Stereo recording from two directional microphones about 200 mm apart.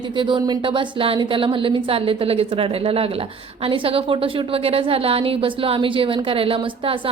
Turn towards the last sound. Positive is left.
turn(degrees=-25)  # may be behind; listen again after turning